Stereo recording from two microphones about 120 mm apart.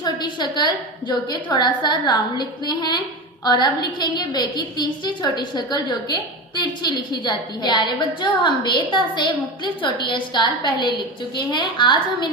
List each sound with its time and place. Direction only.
0.0 s a woman's voice: 40° left (ahead or behind)